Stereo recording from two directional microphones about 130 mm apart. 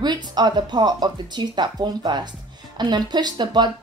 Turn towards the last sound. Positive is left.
turn(degrees=-35)  # may be behind; listen again after turning